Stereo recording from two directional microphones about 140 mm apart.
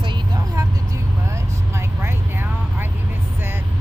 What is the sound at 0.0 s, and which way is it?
Vehicle, 35° right (ahead or behind).